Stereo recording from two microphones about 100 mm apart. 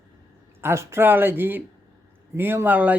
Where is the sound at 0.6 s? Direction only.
25° right (ahead or behind).